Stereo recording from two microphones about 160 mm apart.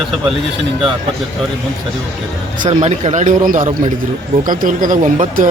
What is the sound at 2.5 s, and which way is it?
A man's voice, 45° right (ahead or behind).